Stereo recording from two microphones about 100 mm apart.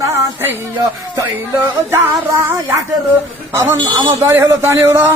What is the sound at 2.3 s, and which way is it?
Speech, 25° right (ahead or behind).